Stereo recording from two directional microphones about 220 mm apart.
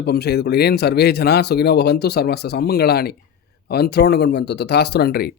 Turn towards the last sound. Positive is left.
turn(degrees=45)  # may be behind; listen again after turning